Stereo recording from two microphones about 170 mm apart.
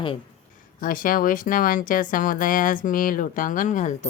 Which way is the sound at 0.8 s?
55° left (ahead or behind).